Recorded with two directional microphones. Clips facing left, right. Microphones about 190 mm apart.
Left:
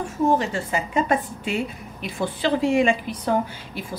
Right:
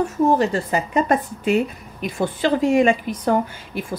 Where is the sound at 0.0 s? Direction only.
35° right (ahead or behind).